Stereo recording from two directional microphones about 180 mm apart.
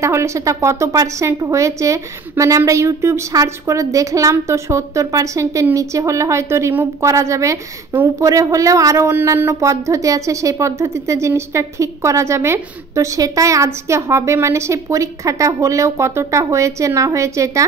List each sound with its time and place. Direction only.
0.0 s a woman's voice: 15° right (ahead or behind)